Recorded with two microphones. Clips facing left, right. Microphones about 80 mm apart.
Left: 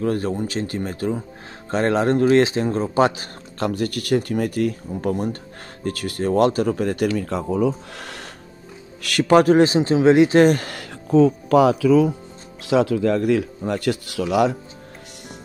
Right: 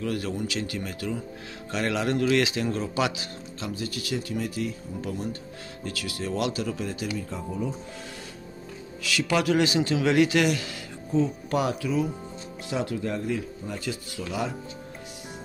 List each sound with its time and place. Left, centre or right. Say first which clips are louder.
0.0 s speech: left 7 dB; left
3.5 s speech: left 11 dB; left
7.2 s speech: left 10 dB; left
9.0 s speech: left 10 dB; left
12.6 s speech: left 11 dB; left